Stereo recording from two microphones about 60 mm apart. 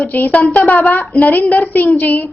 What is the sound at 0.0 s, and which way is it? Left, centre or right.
A woman's voice, left.